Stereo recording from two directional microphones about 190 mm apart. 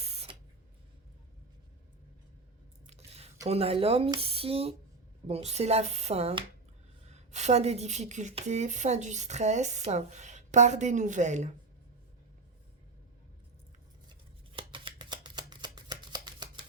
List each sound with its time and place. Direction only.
0.0 s spray: 35° right (ahead or behind)
2.8 s chewing: 35° right (ahead or behind)
3.4 s speech: 30° right (ahead or behind)
14.1 s a sound: 25° right (ahead or behind)